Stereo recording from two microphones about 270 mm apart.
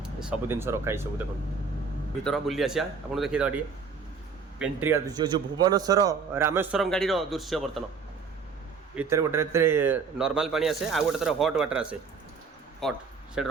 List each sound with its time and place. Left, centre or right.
0.0 s speech: centre
2.2 s a man's voice: centre
4.6 s a man's voice: centre
9.0 s a man's voice: centre